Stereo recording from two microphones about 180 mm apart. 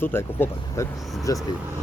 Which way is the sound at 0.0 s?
10° left (ahead or behind).